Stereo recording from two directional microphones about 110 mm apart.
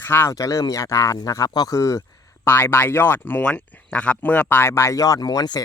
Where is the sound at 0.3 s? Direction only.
30° left (ahead or behind).